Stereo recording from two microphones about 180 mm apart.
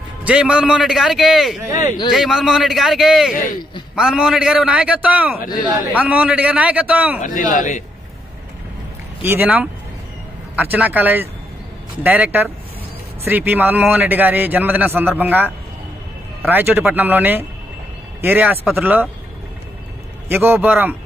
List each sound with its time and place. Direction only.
0.2 s a man's voice: 5° right (ahead or behind)
1.6 s a man's voice: 15° right (ahead or behind)
2.1 s a man's voice: centre (ahead or behind)
7.2 s speech: 45° left (ahead or behind)
9.2 s a man's voice: 10° right (ahead or behind)
20.2 s a man's voice: 15° right (ahead or behind)